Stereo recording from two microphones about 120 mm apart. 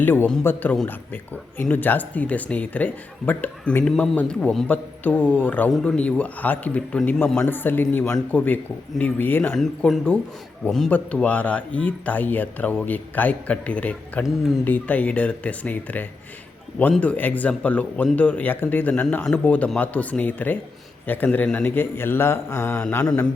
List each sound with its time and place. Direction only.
0.0 s speech: 15° left (ahead or behind)
9.6 s speech: 5° left (ahead or behind)